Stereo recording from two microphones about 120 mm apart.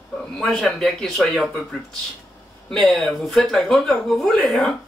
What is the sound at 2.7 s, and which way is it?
Speech, centre (ahead or behind).